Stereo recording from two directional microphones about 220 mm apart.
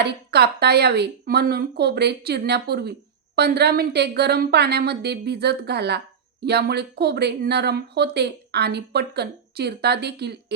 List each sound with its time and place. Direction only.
0.0 s speech: 45° right (ahead or behind)